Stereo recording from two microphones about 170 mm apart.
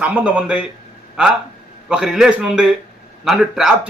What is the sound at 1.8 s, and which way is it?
Speech, 5° right (ahead or behind).